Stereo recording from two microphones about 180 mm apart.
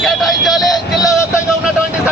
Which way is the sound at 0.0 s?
Centre (ahead or behind).